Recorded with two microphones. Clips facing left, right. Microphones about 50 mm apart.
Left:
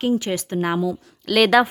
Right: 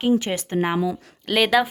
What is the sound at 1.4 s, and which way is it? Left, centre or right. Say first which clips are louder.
Speech: left 3 dB; centre.